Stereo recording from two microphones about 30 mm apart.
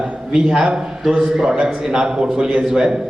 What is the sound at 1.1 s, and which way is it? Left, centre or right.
A man's voice, right.